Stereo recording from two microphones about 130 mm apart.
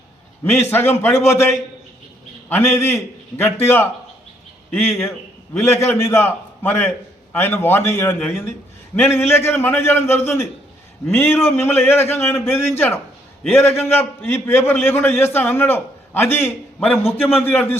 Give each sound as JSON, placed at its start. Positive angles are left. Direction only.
{"t": 0.5, "sound": "a man's voice", "side_deg": 15}